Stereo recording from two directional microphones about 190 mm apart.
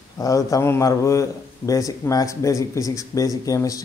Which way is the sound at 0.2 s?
15° left (ahead or behind).